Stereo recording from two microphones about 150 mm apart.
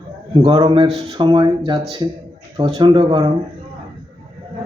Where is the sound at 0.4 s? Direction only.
35° right (ahead or behind).